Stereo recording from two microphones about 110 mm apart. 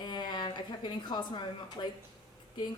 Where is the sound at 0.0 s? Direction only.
40° left (ahead or behind).